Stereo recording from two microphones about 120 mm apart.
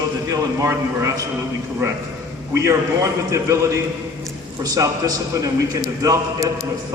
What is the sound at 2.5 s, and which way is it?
A man's voice, 25° right (ahead or behind).